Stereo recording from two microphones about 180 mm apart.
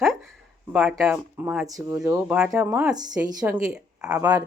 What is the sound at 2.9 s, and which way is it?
Speech, 20° right (ahead or behind).